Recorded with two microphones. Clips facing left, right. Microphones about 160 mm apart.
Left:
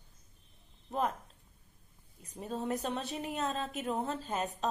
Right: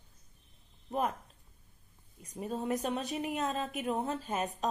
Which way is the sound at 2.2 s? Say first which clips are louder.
Right 1 dB; 10° right (ahead or behind).